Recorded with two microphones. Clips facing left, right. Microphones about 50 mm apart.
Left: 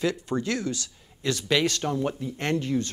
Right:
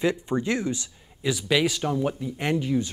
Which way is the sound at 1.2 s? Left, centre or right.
Centre.